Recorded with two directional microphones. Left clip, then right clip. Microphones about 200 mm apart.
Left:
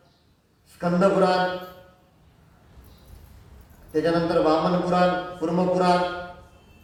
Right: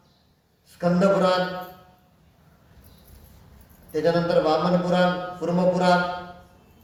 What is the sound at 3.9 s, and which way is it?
Speech, 40° right (ahead or behind).